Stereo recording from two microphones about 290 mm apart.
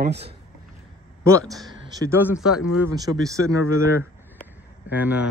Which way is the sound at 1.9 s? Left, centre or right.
Centre.